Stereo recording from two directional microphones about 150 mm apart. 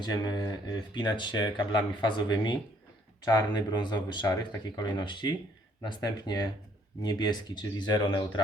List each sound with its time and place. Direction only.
0.0 s speech: 25° left (ahead or behind)